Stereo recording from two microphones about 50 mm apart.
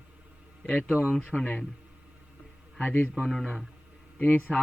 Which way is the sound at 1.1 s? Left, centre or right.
Centre.